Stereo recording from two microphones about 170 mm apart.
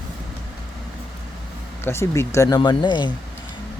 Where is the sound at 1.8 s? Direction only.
15° left (ahead or behind).